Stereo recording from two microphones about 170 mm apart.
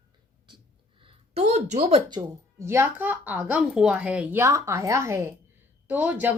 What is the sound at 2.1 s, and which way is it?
A woman's voice, 20° right (ahead or behind).